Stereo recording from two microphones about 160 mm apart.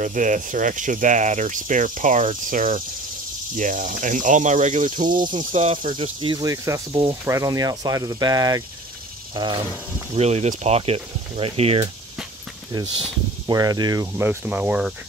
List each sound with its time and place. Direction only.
0.0 s speech: 55° right (ahead or behind)
5.2 s speech: 30° right (ahead or behind)
5.9 s speech: 25° right (ahead or behind)
10.1 s speech: 40° right (ahead or behind)
13.5 s speech: 25° right (ahead or behind); by 15.0 s 5° right (ahead or behind)